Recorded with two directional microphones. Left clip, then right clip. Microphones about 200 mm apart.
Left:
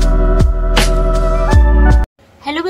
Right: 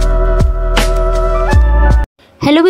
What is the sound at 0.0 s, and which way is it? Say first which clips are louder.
Music: right 1 dB; centre (ahead or behind).